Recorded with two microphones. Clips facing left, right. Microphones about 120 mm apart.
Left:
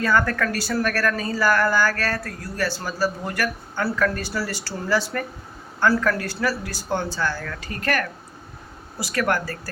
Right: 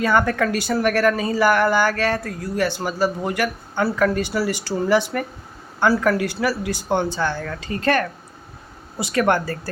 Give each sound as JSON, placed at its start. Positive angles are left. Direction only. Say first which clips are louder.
{"t": 0.0, "sound": "speech", "louder": "right 3 dB", "side_deg": -20}